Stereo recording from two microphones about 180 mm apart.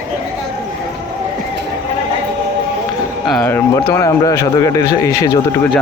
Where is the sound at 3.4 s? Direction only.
10° left (ahead or behind).